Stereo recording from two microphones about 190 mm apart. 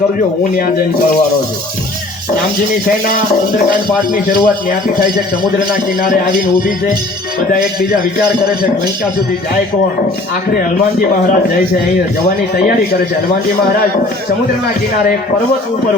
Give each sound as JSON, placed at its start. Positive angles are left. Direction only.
{"t": 3.7, "sound": "speech", "side_deg": 45}
{"t": 5.5, "sound": "speech", "side_deg": 45}